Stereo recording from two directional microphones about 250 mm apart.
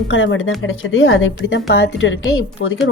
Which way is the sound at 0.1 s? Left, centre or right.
Left.